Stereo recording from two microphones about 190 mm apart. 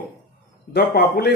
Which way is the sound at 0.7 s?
55° left (ahead or behind).